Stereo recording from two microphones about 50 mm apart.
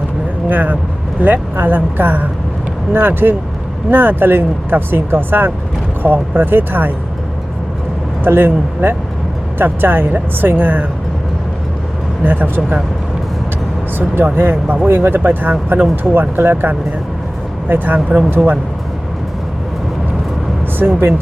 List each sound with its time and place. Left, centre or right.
0.4 s speech: right
8.2 s speech: right
12.2 s speech: right
14.3 s speech: right
20.7 s speech: right